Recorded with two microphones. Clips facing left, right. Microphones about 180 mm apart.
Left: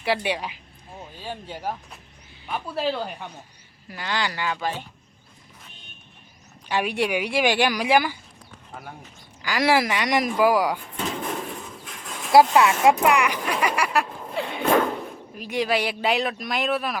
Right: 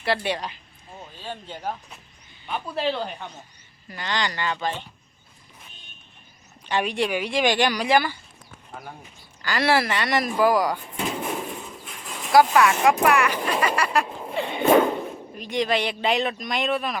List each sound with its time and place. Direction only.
0.0 s speech: 10° left (ahead or behind)
6.7 s speech: 10° left (ahead or behind)
8.7 s speech: centre (ahead or behind)
9.4 s speech: 10° left (ahead or behind)
10.9 s a sound: 5° right (ahead or behind)
12.5 s speech: 25° left (ahead or behind); by 17.0 s 5° left (ahead or behind)